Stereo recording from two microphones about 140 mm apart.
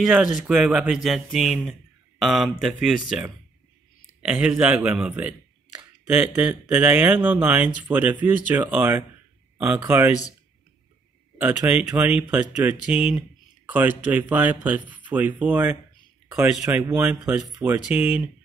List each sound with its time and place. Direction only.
0.0 s speech: centre (ahead or behind); by 10.1 s 15° right (ahead or behind)
11.3 s speech: 15° right (ahead or behind)